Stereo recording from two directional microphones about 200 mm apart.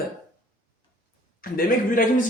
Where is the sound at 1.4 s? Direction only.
45° left (ahead or behind).